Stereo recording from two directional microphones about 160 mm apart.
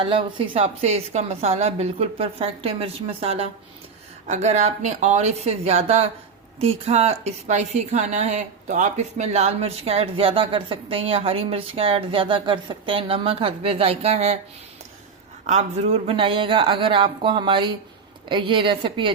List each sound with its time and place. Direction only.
0.0 s a woman's voice: 35° right (ahead or behind)
15.4 s a woman's voice: 45° right (ahead or behind)